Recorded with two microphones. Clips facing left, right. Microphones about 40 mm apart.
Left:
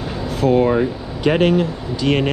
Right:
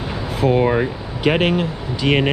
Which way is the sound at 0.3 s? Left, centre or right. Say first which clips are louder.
Left 1 dB; centre.